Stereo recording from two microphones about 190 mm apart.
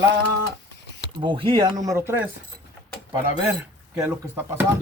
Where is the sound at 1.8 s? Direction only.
15° right (ahead or behind).